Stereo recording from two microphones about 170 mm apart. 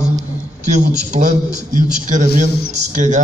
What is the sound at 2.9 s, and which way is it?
Speech, 45° right (ahead or behind).